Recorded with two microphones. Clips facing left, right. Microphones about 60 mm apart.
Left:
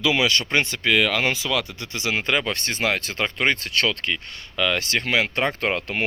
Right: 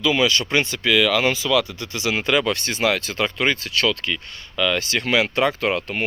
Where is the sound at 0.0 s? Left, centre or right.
Left.